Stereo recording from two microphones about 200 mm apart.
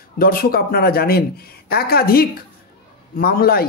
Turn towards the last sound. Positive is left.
turn(degrees=50)  # may be behind; listen again after turning